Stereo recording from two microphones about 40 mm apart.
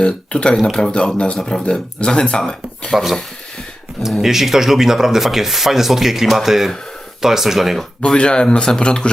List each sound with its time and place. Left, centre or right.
0.0 s speech: left
0.7 s speech: centre
2.0 s speech: left
2.9 s speech: centre
4.2 s speech: centre
8.0 s speech: left